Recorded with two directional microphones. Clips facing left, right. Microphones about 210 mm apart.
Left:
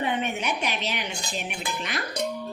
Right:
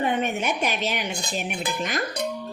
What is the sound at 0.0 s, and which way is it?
A woman's voice, 45° right (ahead or behind).